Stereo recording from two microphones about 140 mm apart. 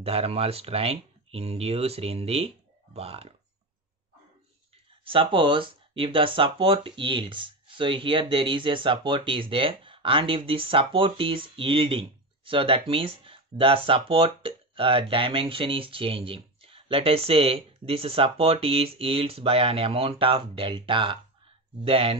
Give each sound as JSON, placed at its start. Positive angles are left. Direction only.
{"t": 0.0, "sound": "speech", "side_deg": -45}
{"t": 5.0, "sound": "speech", "side_deg": -40}